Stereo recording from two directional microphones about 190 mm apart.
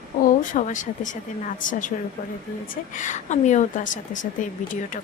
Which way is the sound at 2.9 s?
40° left (ahead or behind).